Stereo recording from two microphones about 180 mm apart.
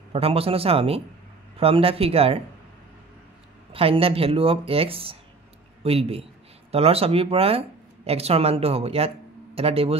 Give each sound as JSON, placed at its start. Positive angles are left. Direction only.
{"t": 0.1, "sound": "speech", "side_deg": -30}
{"t": 3.7, "sound": "speech", "side_deg": -30}